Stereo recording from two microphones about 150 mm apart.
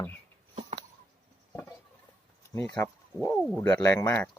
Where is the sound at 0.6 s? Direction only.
40° right (ahead or behind).